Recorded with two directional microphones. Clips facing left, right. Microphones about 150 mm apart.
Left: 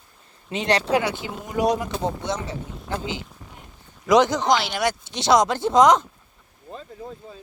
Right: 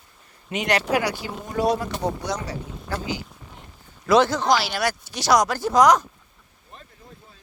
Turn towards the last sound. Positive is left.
turn(degrees=25)  # may be behind; listen again after turning